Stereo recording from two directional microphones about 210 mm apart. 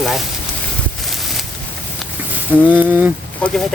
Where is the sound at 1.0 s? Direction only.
Centre (ahead or behind).